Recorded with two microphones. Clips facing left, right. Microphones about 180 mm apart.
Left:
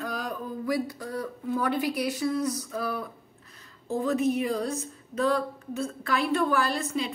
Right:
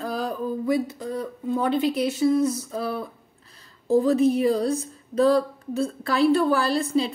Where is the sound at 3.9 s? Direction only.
35° right (ahead or behind).